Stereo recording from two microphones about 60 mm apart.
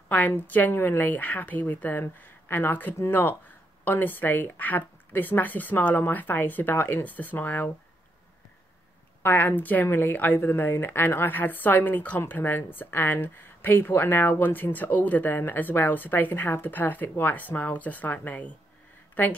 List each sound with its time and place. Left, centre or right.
0.3 s speech: left
9.2 s speech: left